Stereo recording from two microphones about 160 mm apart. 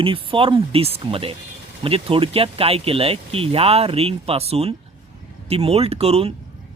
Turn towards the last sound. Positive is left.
turn(degrees=-40)  # may be behind; listen again after turning